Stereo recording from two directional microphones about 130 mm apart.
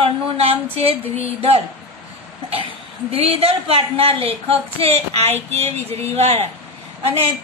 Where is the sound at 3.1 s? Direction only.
50° right (ahead or behind).